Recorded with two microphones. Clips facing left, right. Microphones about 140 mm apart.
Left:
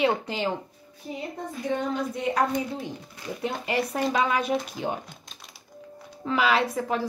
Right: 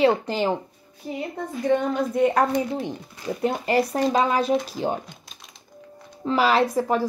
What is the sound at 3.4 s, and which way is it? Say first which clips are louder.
Speech: right 6 dB; 40° right (ahead or behind).